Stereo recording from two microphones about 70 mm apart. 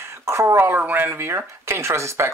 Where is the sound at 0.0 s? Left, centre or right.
Right.